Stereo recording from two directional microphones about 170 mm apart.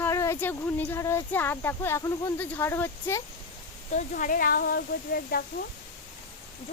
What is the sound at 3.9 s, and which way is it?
Speech, 50° left (ahead or behind).